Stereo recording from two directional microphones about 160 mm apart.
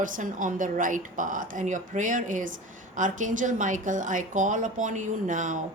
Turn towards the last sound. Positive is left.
turn(degrees=-50)  # may be behind; listen again after turning